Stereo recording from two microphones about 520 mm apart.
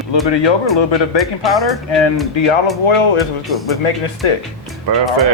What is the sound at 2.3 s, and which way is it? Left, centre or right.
Speech, left.